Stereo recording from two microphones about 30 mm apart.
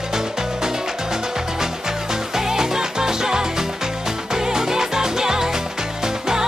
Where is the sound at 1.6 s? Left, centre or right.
Centre.